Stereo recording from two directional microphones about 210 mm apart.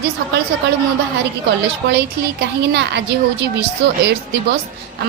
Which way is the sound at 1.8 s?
55° right (ahead or behind).